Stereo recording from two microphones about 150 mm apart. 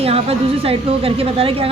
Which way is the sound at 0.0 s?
40° right (ahead or behind).